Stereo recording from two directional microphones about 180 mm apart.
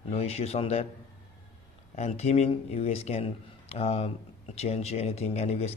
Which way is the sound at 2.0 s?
35° left (ahead or behind).